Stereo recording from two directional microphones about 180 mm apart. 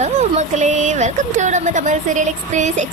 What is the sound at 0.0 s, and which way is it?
A woman's voice, 40° right (ahead or behind).